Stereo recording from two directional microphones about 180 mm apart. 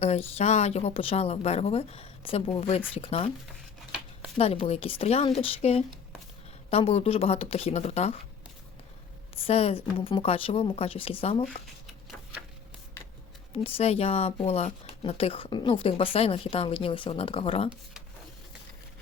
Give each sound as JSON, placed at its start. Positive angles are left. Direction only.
{"t": 0.0, "sound": "speech", "side_deg": 35}
{"t": 4.4, "sound": "speech", "side_deg": 35}
{"t": 9.3, "sound": "speech", "side_deg": 35}
{"t": 13.5, "sound": "speech", "side_deg": 35}